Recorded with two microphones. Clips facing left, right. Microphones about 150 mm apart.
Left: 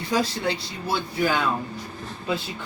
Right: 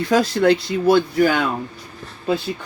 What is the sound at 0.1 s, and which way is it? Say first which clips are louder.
Speech: right 9 dB; 70° right (ahead or behind).